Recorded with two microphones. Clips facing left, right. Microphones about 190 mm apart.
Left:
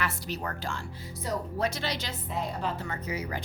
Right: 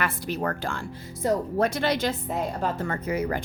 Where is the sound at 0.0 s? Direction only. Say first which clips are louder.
Right 6 dB; 55° right (ahead or behind).